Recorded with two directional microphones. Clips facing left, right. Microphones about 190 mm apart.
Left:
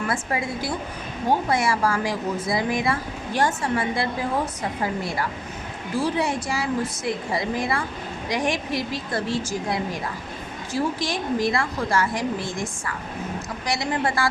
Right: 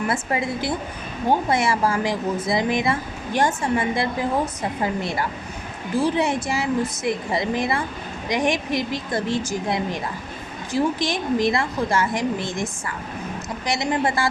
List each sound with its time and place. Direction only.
0.1 s a woman's voice: 25° right (ahead or behind)
13.7 s a woman's voice: 20° right (ahead or behind)